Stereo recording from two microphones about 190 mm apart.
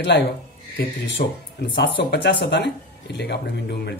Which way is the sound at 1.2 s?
50° left (ahead or behind).